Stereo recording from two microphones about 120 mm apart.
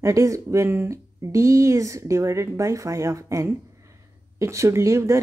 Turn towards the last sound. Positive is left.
turn(degrees=-25)  # may be behind; listen again after turning